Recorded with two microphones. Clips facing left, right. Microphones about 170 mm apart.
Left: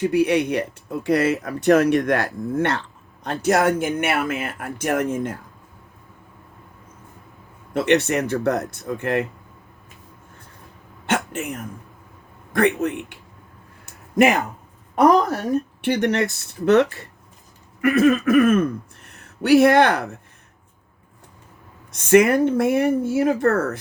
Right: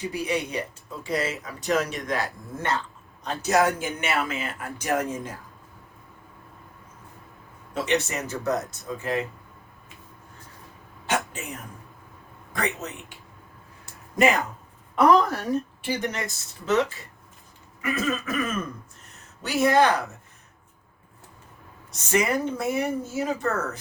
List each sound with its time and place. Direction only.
0.0 s speech: 65° left (ahead or behind)
7.7 s speech: 65° left (ahead or behind)
11.0 s a sound: 60° left (ahead or behind)
12.5 s speech: 60° left (ahead or behind)
14.9 s a woman's voice: 40° left (ahead or behind)
15.8 s speech: 65° left (ahead or behind)
22.1 s speech: 60° left (ahead or behind)